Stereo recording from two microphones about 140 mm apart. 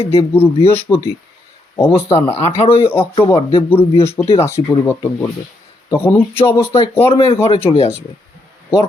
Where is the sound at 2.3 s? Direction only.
45° left (ahead or behind).